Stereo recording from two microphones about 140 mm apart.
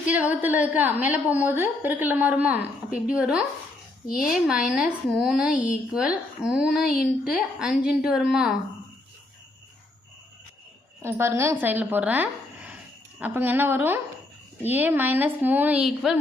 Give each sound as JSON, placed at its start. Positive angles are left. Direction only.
{"t": 0.0, "sound": "a woman's voice", "side_deg": -10}
{"t": 5.5, "sound": "speech", "side_deg": 75}
{"t": 5.9, "sound": "a woman's voice", "side_deg": -5}
{"t": 11.0, "sound": "a woman's voice", "side_deg": -20}